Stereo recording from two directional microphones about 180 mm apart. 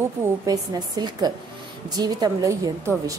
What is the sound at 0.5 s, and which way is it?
A woman's voice, 20° right (ahead or behind).